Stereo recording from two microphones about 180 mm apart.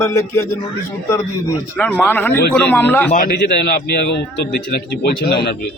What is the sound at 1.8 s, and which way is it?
A man's voice, 10° left (ahead or behind).